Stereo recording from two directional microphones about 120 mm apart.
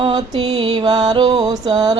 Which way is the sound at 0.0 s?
40° right (ahead or behind).